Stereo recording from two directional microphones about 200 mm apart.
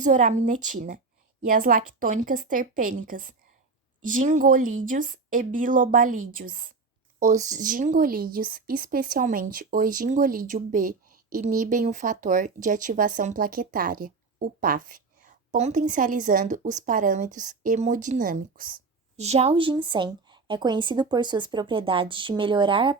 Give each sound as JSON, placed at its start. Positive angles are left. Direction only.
{"t": 0.0, "sound": "speech", "side_deg": -40}